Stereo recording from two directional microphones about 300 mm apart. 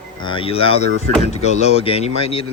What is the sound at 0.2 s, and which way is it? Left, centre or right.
Speech, centre.